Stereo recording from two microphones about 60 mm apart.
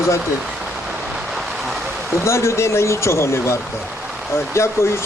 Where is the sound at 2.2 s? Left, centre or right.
Left.